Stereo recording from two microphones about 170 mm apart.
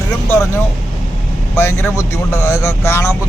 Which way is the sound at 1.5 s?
15° left (ahead or behind).